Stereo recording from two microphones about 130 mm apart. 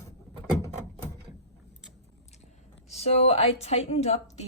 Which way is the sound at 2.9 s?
55° left (ahead or behind).